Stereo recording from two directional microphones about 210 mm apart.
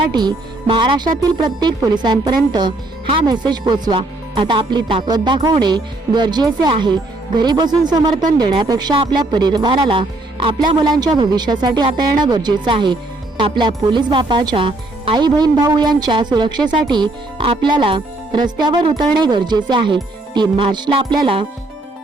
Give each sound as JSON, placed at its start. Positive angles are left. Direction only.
{"t": 0.1, "sound": "speech", "side_deg": -20}